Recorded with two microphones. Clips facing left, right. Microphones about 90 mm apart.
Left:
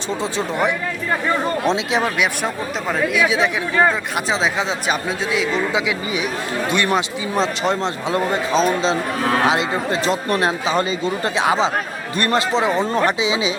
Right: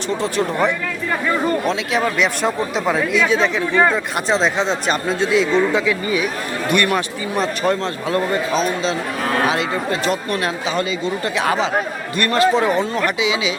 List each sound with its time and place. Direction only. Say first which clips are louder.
0.2 s speech: right 2 dB; 15° left (ahead or behind)
2.0 s speech: right 2 dB; 5° left (ahead or behind)
3.2 s speech: right 1 dB; 15° left (ahead or behind)
5.7 s speech: right 3 dB; 15° left (ahead or behind)
8.5 s speech: left 2 dB; 35° left (ahead or behind)
12.9 s speech: left 1 dB; 30° left (ahead or behind)